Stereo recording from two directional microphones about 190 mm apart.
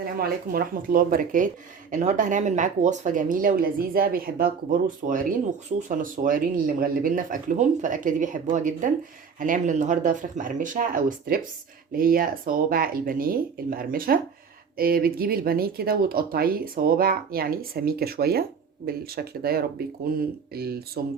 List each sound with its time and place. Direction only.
0.0 s speech: 50° right (ahead or behind)